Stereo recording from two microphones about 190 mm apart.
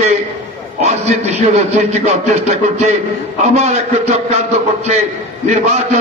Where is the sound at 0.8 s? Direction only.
35° right (ahead or behind).